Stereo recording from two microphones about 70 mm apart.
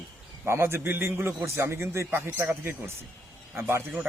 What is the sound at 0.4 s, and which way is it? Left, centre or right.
A man's voice, right.